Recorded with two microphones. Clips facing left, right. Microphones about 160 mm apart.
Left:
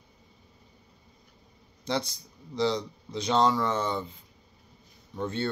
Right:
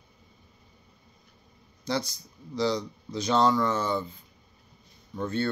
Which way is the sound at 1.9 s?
25° left (ahead or behind).